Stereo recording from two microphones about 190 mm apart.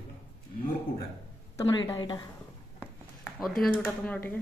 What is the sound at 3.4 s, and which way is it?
A woman's voice, centre (ahead or behind).